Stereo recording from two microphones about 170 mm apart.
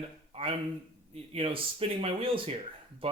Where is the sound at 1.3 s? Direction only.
35° right (ahead or behind).